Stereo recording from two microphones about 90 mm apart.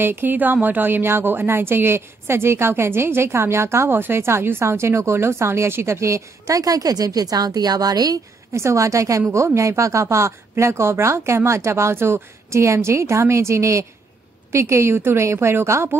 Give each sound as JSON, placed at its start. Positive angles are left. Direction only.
{"t": 0.0, "sound": "a woman's voice", "side_deg": -25}
{"t": 8.5, "sound": "a woman's voice", "side_deg": -35}